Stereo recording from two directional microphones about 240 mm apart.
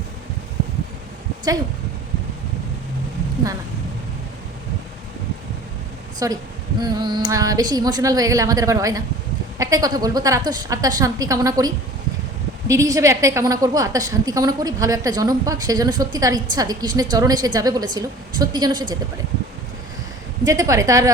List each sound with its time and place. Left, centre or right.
6.1 s a woman's voice: centre
20.4 s a woman's voice: centre